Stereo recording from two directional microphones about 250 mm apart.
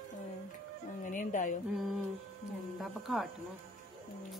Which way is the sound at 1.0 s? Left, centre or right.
Left.